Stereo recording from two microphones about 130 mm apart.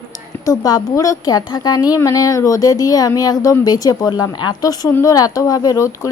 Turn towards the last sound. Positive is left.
turn(degrees=25)  # may be behind; listen again after turning